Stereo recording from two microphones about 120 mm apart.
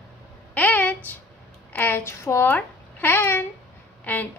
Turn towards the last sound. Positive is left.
turn(degrees=15)  # may be behind; listen again after turning